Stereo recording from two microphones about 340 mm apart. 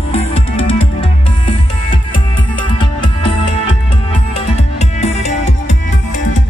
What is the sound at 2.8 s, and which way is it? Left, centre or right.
Music, centre.